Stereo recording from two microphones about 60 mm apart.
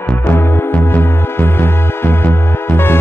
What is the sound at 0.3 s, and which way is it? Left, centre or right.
Music, left.